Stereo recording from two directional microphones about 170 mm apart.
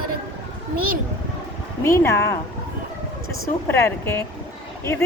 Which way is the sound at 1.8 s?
15° left (ahead or behind).